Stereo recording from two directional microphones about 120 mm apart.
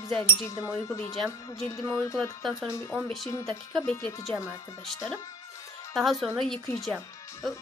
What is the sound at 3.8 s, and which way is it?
Speech, 10° left (ahead or behind).